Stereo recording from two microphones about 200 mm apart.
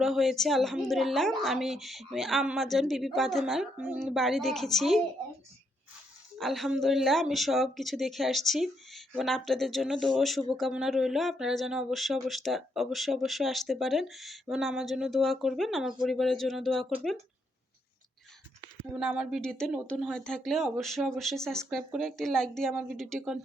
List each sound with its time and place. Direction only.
0.0 s speech: centre (ahead or behind)
6.4 s speech: centre (ahead or behind)
18.9 s speech: 5° right (ahead or behind)